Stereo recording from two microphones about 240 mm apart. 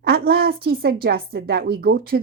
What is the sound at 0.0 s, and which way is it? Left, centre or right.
A woman's voice, right.